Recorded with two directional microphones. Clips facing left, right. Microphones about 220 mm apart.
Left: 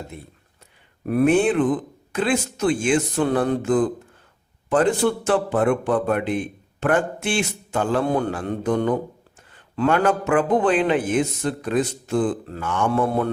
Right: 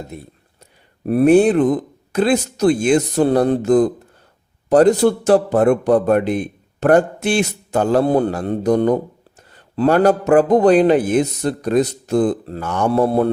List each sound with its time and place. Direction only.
0.1 s a man's voice: 40° right (ahead or behind)